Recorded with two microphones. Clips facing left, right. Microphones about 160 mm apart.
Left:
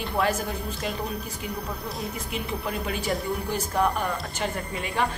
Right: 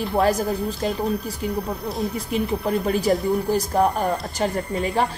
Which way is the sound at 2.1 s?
35° right (ahead or behind).